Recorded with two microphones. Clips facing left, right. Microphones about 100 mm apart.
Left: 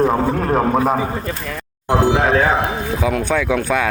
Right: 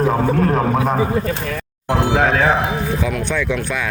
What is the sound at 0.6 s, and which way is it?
Speech, 5° left (ahead or behind).